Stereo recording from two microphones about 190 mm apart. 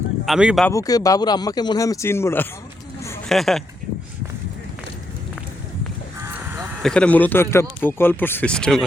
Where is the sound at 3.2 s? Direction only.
Centre (ahead or behind).